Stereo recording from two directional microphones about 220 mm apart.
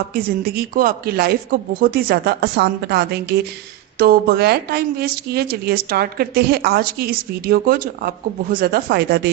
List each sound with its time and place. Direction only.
0.1 s a woman's voice: 45° right (ahead or behind)